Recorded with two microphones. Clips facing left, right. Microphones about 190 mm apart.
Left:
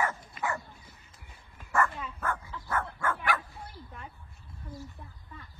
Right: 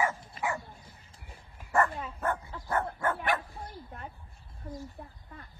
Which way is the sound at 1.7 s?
35° right (ahead or behind).